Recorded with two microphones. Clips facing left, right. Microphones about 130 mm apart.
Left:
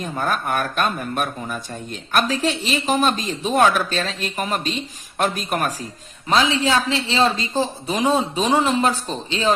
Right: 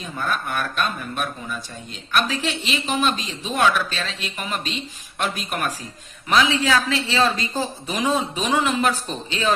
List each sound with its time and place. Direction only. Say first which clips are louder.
0.0 s speech: left 3 dB; 45° left (ahead or behind)
6.2 s a woman's voice: left 1 dB; 30° left (ahead or behind)